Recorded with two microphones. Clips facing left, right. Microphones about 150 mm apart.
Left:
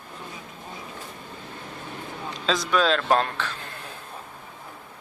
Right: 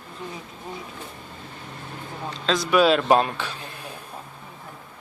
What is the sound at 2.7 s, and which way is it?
Speech, 10° right (ahead or behind).